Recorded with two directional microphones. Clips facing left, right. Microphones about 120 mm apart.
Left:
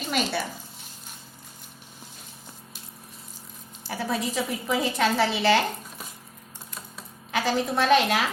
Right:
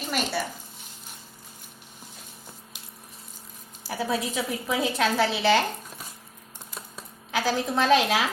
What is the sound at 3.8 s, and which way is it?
A woman's voice, 5° right (ahead or behind).